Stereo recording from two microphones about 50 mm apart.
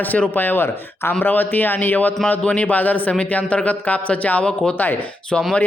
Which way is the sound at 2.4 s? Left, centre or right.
Left.